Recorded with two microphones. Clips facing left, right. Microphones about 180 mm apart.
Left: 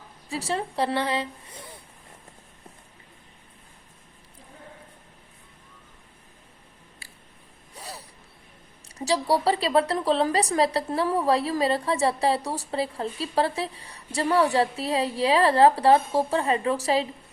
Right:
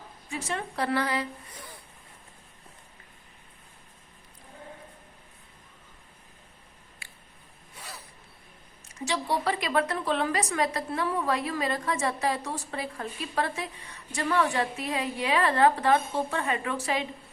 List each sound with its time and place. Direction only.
0.3 s a woman's voice: 35° left (ahead or behind)
7.8 s gasp: 35° left (ahead or behind)
9.0 s speech: 35° left (ahead or behind)